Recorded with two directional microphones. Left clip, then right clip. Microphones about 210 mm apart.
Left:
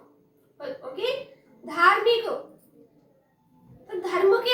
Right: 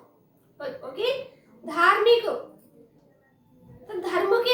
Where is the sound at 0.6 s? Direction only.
15° right (ahead or behind).